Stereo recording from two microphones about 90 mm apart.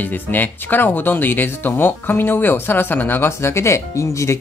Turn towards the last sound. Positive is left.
turn(degrees=35)  # may be behind; listen again after turning